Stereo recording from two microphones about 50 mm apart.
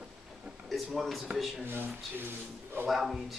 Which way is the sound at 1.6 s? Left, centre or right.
Right.